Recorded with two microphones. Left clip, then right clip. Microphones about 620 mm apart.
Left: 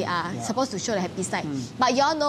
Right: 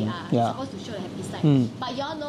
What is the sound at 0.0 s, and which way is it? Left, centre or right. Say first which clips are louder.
A woman's voice: right 2 dB; left.